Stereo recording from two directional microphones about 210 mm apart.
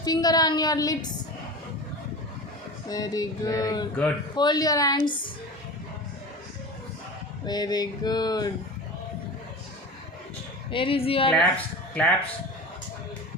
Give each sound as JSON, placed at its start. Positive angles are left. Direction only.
{"t": 0.0, "sound": "speech", "side_deg": 20}
{"t": 2.9, "sound": "speech", "side_deg": 15}
{"t": 7.4, "sound": "speech", "side_deg": 20}
{"t": 10.7, "sound": "speech", "side_deg": 25}
{"t": 11.3, "sound": "speech", "side_deg": 5}